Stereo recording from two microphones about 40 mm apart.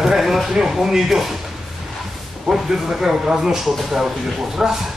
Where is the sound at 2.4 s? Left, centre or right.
Centre.